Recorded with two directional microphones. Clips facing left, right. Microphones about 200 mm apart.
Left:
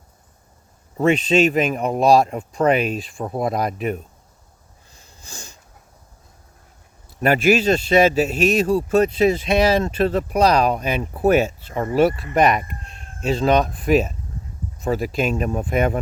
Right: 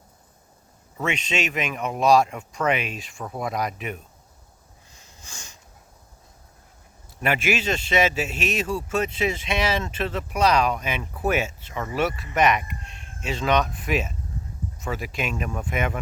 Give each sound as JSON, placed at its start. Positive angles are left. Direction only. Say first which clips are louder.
{"t": 0.9, "sound": "a man's voice", "louder": "left 11 dB", "side_deg": 35}
{"t": 5.2, "sound": "sniff", "louder": "left 5 dB", "side_deg": 35}
{"t": 7.2, "sound": "a man's voice", "louder": "left 8 dB", "side_deg": 40}